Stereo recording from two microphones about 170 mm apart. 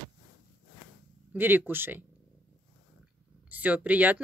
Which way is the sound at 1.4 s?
10° right (ahead or behind).